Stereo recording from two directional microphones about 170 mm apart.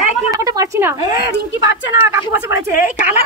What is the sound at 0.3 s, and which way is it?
A woman's voice, 20° right (ahead or behind).